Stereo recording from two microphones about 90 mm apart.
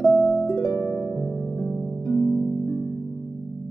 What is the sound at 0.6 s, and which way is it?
Harp, 30° left (ahead or behind).